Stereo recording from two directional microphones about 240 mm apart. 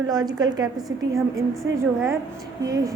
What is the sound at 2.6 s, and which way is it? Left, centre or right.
Speech, centre.